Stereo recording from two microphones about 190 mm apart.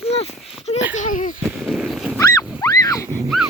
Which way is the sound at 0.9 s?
40° left (ahead or behind).